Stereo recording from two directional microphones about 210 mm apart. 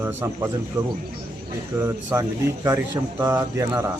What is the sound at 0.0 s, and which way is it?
Speech, 10° right (ahead or behind).